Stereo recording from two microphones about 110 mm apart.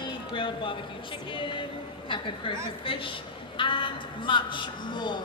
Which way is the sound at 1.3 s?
50° left (ahead or behind).